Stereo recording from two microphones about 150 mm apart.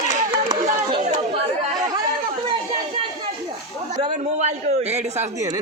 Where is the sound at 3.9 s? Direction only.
50° right (ahead or behind).